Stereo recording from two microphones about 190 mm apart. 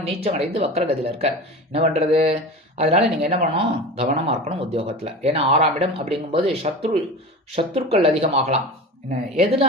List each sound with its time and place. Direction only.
0.0 s speech: 30° right (ahead or behind)